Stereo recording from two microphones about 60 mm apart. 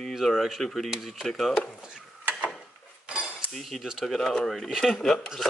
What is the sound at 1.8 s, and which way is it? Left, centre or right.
Speech, centre.